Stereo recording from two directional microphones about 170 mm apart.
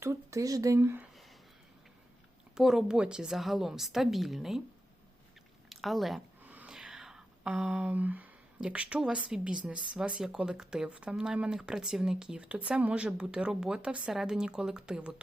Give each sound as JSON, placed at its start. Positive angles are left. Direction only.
{"t": 0.0, "sound": "speech", "side_deg": -15}
{"t": 2.6, "sound": "speech", "side_deg": -5}
{"t": 5.6, "sound": "a sound", "side_deg": 0}
{"t": 9.6, "sound": "speech", "side_deg": -5}